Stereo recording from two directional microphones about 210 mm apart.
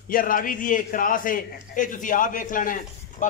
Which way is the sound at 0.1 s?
40° left (ahead or behind).